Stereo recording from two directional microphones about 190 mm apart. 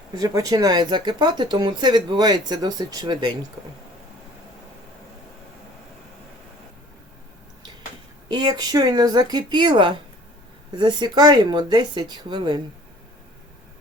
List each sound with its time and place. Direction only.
0.1 s speech: 20° right (ahead or behind)
8.3 s speech: 20° right (ahead or behind)